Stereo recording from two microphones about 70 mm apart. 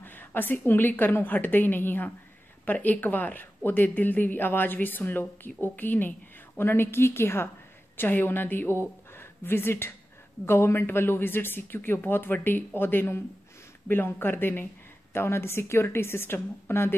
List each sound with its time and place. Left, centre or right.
0.0 s speech: left